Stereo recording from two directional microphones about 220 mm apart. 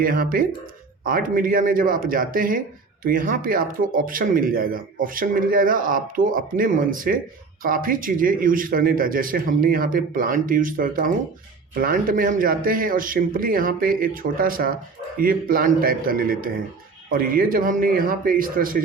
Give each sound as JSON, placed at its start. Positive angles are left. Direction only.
{"t": 0.0, "sound": "a man's voice", "side_deg": -40}